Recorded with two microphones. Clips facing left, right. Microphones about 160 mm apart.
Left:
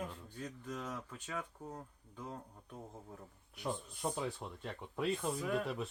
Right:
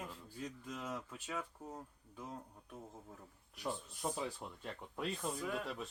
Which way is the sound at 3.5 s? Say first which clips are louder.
Left 2 dB; centre (ahead or behind).